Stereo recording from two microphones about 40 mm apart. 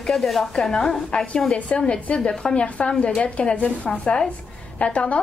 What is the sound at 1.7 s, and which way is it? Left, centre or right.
A woman's voice, left.